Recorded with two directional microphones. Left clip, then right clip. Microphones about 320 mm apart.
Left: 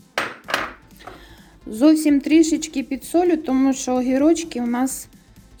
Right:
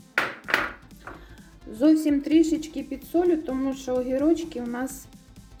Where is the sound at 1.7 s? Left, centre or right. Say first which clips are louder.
Left 5 dB; left.